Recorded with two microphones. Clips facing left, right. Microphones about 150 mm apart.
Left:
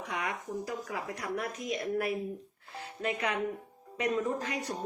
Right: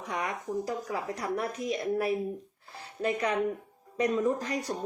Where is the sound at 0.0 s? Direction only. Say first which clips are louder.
Right 2 dB; 40° right (ahead or behind).